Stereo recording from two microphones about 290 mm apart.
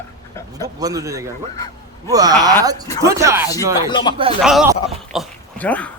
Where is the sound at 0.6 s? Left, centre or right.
Centre.